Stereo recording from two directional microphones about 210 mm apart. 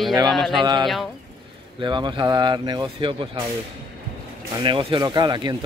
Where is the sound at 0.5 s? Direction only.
20° right (ahead or behind).